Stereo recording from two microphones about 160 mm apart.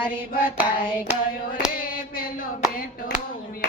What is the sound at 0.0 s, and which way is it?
Hands, 10° right (ahead or behind).